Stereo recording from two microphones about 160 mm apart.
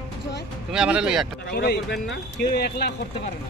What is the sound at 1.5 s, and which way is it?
Speech, 90° left.